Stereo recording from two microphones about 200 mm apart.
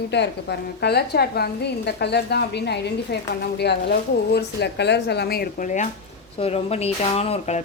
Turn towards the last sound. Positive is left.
turn(degrees=30)  # may be behind; listen again after turning